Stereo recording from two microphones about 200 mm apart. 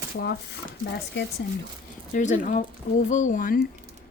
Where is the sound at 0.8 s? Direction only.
60° left (ahead or behind).